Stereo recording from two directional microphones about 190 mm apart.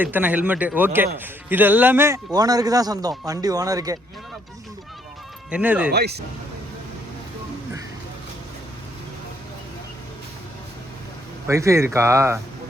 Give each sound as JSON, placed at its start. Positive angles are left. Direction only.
{"t": 0.0, "sound": "speech", "side_deg": -10}
{"t": 5.5, "sound": "speech", "side_deg": -5}
{"t": 5.9, "sound": "speech", "side_deg": -60}
{"t": 11.4, "sound": "speech", "side_deg": -15}